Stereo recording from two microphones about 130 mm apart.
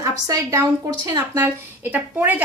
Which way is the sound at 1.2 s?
15° right (ahead or behind).